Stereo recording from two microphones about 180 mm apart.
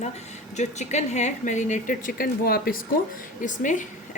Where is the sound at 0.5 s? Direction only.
40° left (ahead or behind).